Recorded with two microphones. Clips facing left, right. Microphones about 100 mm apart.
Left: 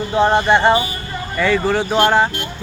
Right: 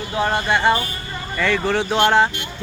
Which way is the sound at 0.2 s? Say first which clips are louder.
Left 6 dB; 25° left (ahead or behind).